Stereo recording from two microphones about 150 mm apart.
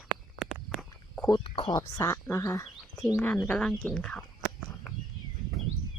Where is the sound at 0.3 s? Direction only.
5° right (ahead or behind).